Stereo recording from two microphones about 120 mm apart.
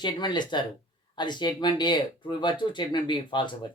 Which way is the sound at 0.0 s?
40° left (ahead or behind).